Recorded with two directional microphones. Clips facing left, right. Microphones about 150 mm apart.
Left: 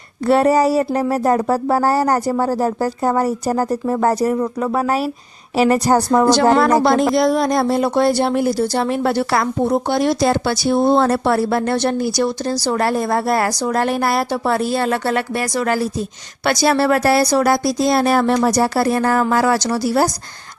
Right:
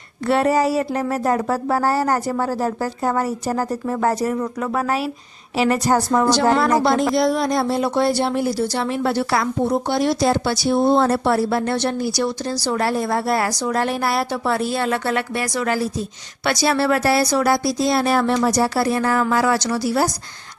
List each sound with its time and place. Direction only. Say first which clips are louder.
0.3 s speech: left 4 dB; 40° left (ahead or behind)
6.2 s speech: left 4 dB; 50° left (ahead or behind)
6.5 s speech: left 3 dB; 40° left (ahead or behind)
10.2 s speech: left 2 dB; 60° left (ahead or behind); by 20.1 s 40° left (ahead or behind)